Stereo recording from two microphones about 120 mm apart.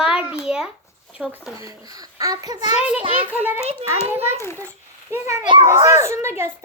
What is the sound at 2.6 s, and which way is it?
Speech, 70° left (ahead or behind).